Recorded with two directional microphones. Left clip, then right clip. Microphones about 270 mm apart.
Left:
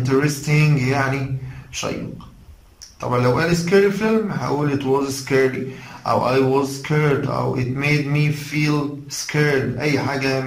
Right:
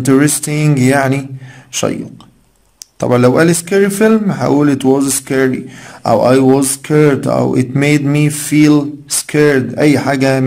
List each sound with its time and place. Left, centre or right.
0.0 s speech: right
3.0 s speech: right